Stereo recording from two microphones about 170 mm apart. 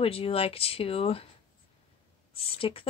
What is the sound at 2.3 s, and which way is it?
Speech, 35° left (ahead or behind).